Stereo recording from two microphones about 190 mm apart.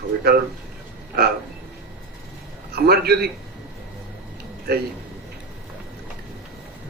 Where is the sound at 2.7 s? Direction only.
55° right (ahead or behind).